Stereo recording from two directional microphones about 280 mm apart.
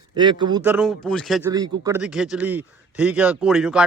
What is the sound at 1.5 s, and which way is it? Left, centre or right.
Speech, centre.